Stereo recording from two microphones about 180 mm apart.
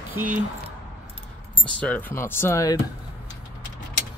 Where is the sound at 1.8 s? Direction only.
10° left (ahead or behind).